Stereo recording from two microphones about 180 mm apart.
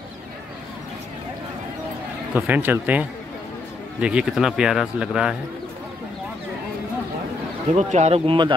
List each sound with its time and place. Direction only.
2.3 s speech: 10° right (ahead or behind)
7.7 s speech: 40° right (ahead or behind)